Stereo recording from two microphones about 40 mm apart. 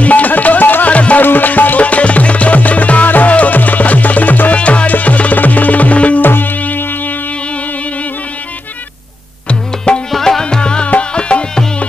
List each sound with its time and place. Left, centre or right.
0.0 s music: left
0.9 s music: left
1.2 s music: left
4.6 s music: left
4.8 s music: left
6.2 s music: left
9.5 s music: left
10.1 s tabla: centre
10.4 s music: left